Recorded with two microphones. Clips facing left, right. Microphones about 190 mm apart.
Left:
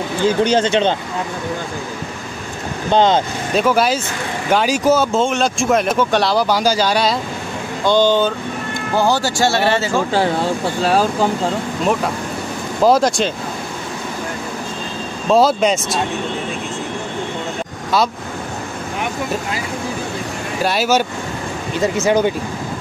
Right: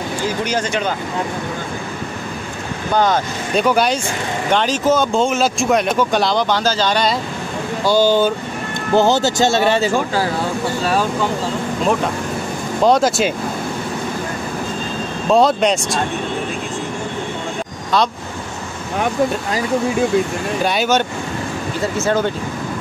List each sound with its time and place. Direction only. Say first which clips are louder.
0.4 s speech: left 7 dB; 30° left (ahead or behind)
2.9 s speech: left 3 dB; 25° left (ahead or behind)
3.5 s speech: even; centre (ahead or behind)
7.8 s speech: even; 10° right (ahead or behind)
8.9 s speech: right 3 dB; 20° right (ahead or behind)
12.8 s speech: left 1 dB; centre (ahead or behind)
15.2 s speech: even; centre (ahead or behind)
20.6 s speech: left 1 dB; 5° left (ahead or behind)
21.7 s speech: left 3 dB; 20° left (ahead or behind)